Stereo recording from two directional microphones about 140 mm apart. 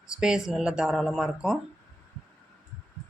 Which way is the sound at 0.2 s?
5° right (ahead or behind).